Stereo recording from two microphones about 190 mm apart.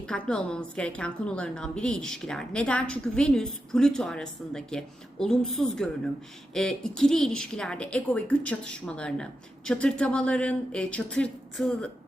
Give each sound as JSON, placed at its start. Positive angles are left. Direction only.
{"t": 0.0, "sound": "a woman's voice", "side_deg": 5}